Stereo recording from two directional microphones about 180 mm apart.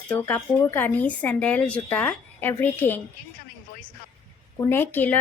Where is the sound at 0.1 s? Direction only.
10° left (ahead or behind).